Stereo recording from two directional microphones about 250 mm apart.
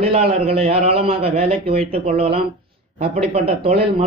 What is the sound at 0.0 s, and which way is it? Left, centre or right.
A man's voice, right.